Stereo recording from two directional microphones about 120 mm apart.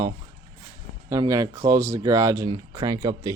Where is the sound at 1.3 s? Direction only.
25° right (ahead or behind).